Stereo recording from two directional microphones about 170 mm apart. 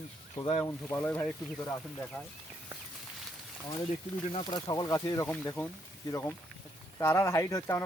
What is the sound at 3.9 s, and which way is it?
Speech, 35° left (ahead or behind).